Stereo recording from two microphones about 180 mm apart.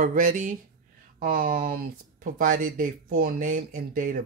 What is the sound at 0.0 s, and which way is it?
Speech, 50° right (ahead or behind).